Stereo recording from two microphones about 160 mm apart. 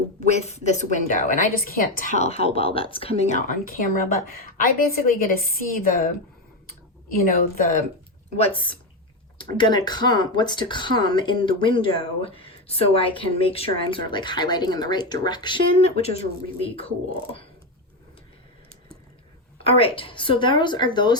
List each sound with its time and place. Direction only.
0.3 s a woman's voice: 40° left (ahead or behind); by 2.0 s 65° left (ahead or behind)
2.1 s speech: 40° left (ahead or behind); by 7.7 s 65° left (ahead or behind)
8.4 s speech: 30° left (ahead or behind)
19.5 s speech: 35° left (ahead or behind)